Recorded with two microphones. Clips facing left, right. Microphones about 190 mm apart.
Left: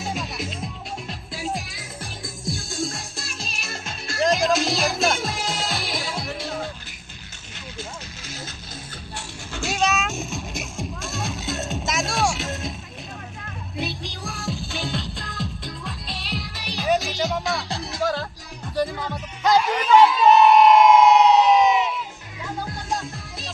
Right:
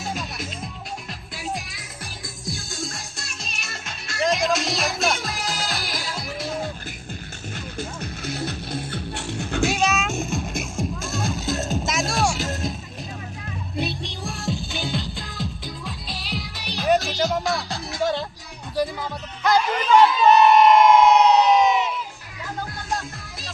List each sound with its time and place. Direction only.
0.0 s music: centre (ahead or behind)
7.8 s music: 60° right (ahead or behind)
9.6 s music: centre (ahead or behind)
13.7 s music: centre (ahead or behind)
19.7 s crowd: 5° left (ahead or behind)
22.9 s music: centre (ahead or behind)